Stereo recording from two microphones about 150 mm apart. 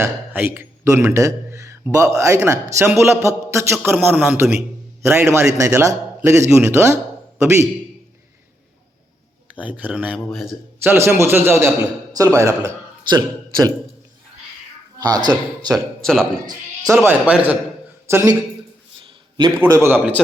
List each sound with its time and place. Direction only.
0.0 s a man's voice: 15° right (ahead or behind)
9.6 s a man's voice: 10° right (ahead or behind)
10.2 s speech: centre (ahead or behind)
10.8 s a man's voice: 15° right (ahead or behind)
14.9 s speech: 25° right (ahead or behind)
15.7 s speech: 5° left (ahead or behind)
16.9 s a man's voice: 15° right (ahead or behind)
19.5 s a man's voice: 20° right (ahead or behind)